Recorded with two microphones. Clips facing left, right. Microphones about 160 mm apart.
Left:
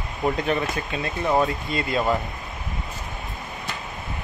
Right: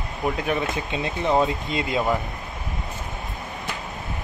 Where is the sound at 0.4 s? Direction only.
10° right (ahead or behind).